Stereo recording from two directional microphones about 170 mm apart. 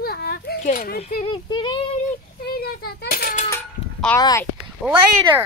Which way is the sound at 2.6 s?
65° left (ahead or behind).